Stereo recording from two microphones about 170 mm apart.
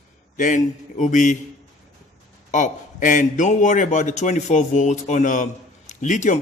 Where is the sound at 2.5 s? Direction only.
45° left (ahead or behind).